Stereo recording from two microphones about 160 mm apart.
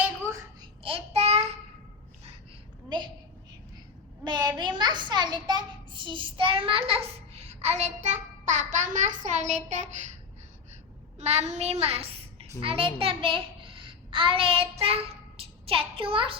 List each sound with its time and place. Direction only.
0.6 s child singing: 35° right (ahead or behind)
4.2 s a sound: 25° right (ahead or behind); by 10.0 s 50° right (ahead or behind)
11.2 s a child's voice: 45° right (ahead or behind)